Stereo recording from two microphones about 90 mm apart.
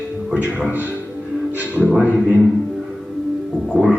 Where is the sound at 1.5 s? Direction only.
20° right (ahead or behind).